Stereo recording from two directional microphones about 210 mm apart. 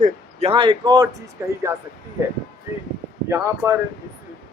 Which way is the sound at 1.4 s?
10° right (ahead or behind).